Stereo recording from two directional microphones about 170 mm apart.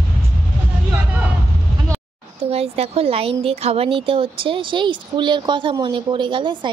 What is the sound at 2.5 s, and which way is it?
Speech, 35° right (ahead or behind).